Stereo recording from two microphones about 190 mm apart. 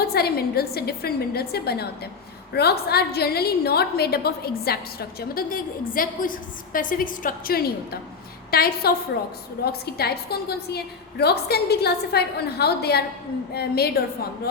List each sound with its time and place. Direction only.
0.1 s a woman's voice: 55° left (ahead or behind)